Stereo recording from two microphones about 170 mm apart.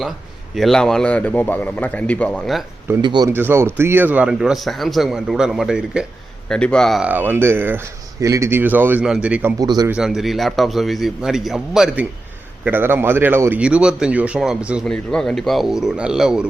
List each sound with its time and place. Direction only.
0.5 s speech: centre (ahead or behind)
3.0 s a man's voice: 25° right (ahead or behind)
3.2 s a man's voice: 15° right (ahead or behind); by 7.1 s centre (ahead or behind)
7.1 s speech: 10° right (ahead or behind)
9.6 s a man's voice: 20° right (ahead or behind)
9.9 s a man's voice: 5° right (ahead or behind)